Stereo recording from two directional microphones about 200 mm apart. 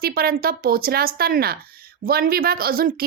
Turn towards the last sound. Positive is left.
turn(degrees=-45)  # may be behind; listen again after turning